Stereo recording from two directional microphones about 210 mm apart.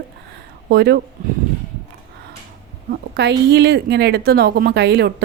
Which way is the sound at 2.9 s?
55° right (ahead or behind).